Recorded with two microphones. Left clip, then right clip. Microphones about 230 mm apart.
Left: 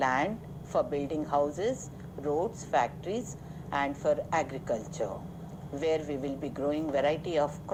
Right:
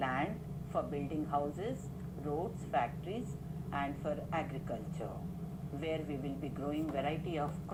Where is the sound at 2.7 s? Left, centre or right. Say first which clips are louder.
Left 7 dB; left.